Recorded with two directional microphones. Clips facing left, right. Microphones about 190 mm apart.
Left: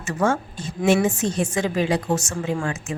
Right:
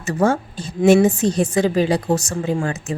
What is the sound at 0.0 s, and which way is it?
A woman's voice, 35° right (ahead or behind).